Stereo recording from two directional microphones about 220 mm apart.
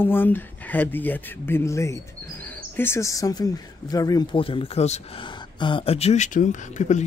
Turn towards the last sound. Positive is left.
turn(degrees=35)  # may be behind; listen again after turning